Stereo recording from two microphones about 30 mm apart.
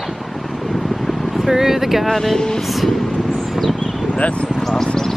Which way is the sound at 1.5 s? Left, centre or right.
Centre.